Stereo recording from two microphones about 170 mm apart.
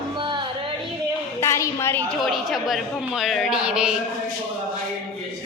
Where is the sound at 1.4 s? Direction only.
15° left (ahead or behind).